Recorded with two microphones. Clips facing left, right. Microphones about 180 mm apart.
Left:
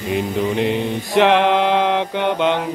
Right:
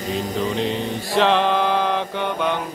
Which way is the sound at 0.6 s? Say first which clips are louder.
Left 4 dB; 70° left (ahead or behind).